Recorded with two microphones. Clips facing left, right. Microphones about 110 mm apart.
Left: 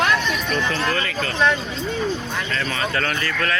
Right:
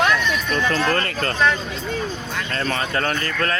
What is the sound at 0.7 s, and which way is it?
Speech, 50° right (ahead or behind).